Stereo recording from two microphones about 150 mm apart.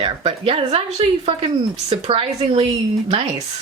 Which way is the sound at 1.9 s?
40° right (ahead or behind).